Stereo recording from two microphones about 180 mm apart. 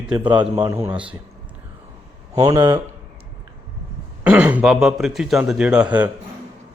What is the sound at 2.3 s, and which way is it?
Speech, 20° right (ahead or behind).